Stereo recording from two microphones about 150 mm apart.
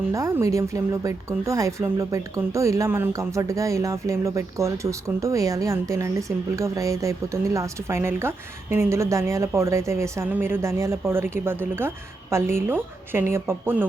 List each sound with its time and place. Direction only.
0.1 s speech: 20° right (ahead or behind)